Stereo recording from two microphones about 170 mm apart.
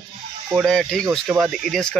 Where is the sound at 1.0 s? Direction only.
20° right (ahead or behind).